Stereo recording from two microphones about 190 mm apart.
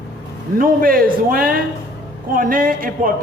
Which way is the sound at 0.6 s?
50° right (ahead or behind).